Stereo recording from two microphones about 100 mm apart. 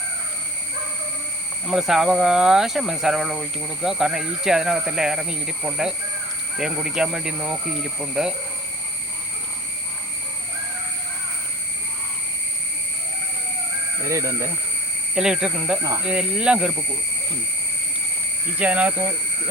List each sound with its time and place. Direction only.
1.6 s speech: 5° right (ahead or behind)
14.1 s speech: 30° right (ahead or behind)
15.1 s speech: 5° right (ahead or behind)
18.5 s speech: 15° right (ahead or behind)